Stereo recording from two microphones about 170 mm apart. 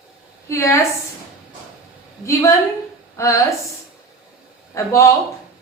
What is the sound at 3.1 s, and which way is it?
Speech, 20° left (ahead or behind).